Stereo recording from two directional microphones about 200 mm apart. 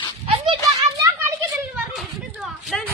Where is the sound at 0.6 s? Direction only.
15° right (ahead or behind).